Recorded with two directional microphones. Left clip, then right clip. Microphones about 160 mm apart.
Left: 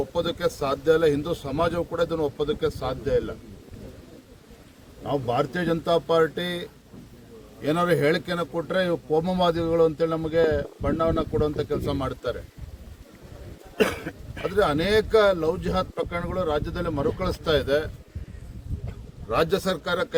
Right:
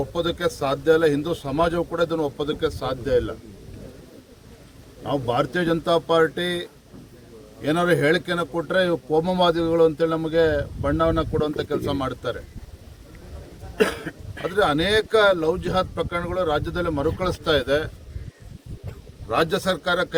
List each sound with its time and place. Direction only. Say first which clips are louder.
0.1 s a man's voice: right 1 dB; centre (ahead or behind)
5.0 s a man's voice: right 2 dB; 5° right (ahead or behind)
13.7 s cough: right 2 dB; 55° left (ahead or behind)
14.4 s a man's voice: right 2 dB; centre (ahead or behind)
19.3 s a man's voice: right 2 dB; centre (ahead or behind)